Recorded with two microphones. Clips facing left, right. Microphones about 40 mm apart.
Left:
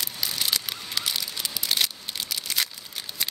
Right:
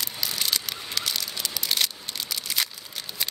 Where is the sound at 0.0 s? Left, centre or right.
Centre.